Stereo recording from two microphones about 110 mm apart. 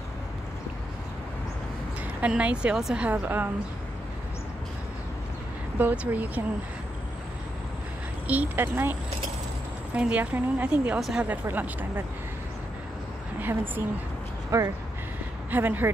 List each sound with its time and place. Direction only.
2.2 s a woman's voice: 10° right (ahead or behind)
3.2 s speech: 20° right (ahead or behind)
5.8 s a woman's voice: 15° right (ahead or behind)
8.3 s speech: 15° right (ahead or behind)
9.9 s a woman's voice: 10° right (ahead or behind)
11.0 s a woman's voice: centre (ahead or behind)
11.2 s a woman's voice: 15° right (ahead or behind)
13.4 s a woman's voice: 15° right (ahead or behind)
14.5 s a woman's voice: 25° right (ahead or behind)